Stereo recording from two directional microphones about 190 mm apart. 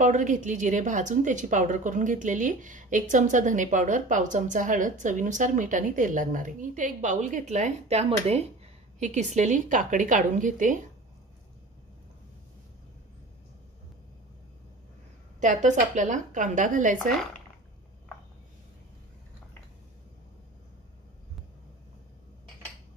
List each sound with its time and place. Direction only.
0.0 s a woman's voice: 40° right (ahead or behind)
15.4 s a woman's voice: 40° right (ahead or behind)